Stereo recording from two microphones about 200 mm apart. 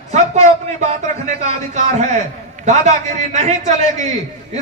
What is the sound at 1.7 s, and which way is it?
A man's voice, 35° right (ahead or behind).